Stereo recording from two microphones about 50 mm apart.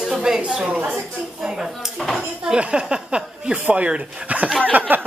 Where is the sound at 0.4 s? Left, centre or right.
Centre.